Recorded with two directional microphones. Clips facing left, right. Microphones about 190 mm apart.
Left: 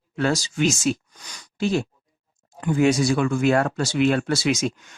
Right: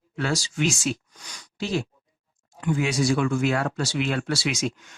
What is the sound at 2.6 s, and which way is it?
Speech, 40° left (ahead or behind).